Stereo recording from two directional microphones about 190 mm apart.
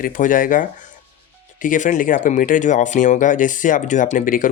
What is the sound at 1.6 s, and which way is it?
Speech, 45° left (ahead or behind).